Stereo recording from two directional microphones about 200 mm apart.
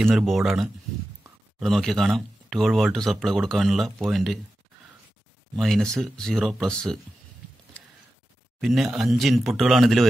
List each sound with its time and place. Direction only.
0.0 s speech: centre (ahead or behind)
5.6 s speech: centre (ahead or behind)
8.5 s speech: centre (ahead or behind)